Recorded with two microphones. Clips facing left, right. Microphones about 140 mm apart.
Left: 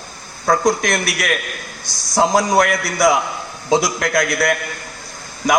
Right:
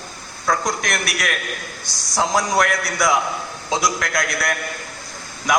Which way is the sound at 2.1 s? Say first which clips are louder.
Left 5 dB; 35° left (ahead or behind).